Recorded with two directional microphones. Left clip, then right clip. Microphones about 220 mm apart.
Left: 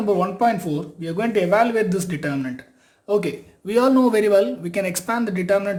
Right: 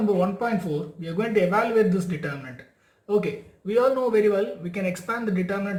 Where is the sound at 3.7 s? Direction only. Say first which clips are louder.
Left 4 dB; 55° left (ahead or behind).